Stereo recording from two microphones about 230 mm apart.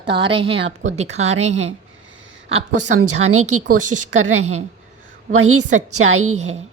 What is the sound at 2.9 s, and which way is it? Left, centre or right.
Speech, right.